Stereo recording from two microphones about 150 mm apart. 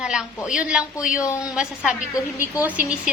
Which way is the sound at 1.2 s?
20° left (ahead or behind).